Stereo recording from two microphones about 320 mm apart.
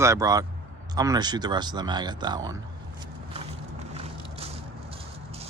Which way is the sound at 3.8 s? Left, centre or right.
Centre.